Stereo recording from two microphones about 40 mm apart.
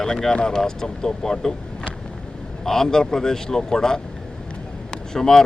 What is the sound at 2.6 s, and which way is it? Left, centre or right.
Speech, centre.